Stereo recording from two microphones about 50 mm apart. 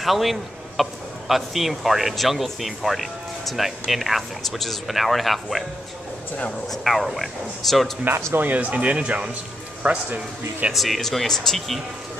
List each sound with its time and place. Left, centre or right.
0.0 s speech: centre
6.7 s speech: centre
8.4 s speech: right
10.7 s speech: centre